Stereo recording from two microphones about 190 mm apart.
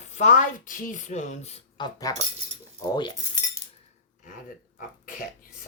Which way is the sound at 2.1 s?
20° left (ahead or behind).